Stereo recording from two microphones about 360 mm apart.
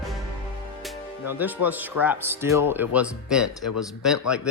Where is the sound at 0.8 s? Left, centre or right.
Centre.